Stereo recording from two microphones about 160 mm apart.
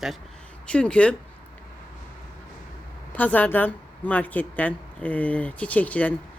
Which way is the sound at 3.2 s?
10° left (ahead or behind).